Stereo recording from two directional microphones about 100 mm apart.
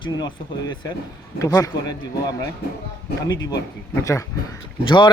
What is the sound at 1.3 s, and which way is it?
Speech, 35° left (ahead or behind).